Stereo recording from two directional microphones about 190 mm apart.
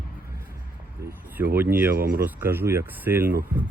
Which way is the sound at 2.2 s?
10° right (ahead or behind).